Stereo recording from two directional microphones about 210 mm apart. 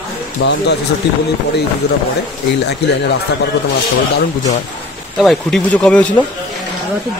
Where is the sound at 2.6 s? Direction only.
55° left (ahead or behind).